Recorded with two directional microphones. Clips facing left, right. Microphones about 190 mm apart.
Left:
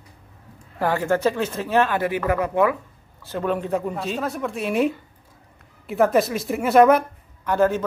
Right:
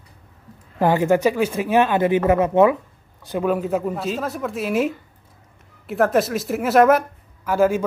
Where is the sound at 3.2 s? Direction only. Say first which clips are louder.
Right 3 dB; 10° right (ahead or behind).